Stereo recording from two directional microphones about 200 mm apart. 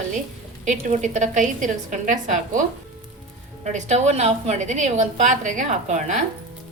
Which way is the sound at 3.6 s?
35° right (ahead or behind).